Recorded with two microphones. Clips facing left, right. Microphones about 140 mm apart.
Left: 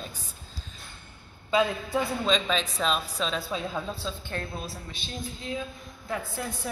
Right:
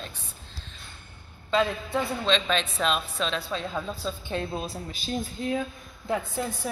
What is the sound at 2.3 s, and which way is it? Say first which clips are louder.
Speech: right 1 dB; 5° left (ahead or behind).